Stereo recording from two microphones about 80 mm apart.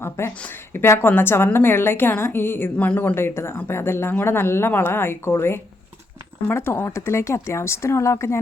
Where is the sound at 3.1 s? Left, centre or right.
Left.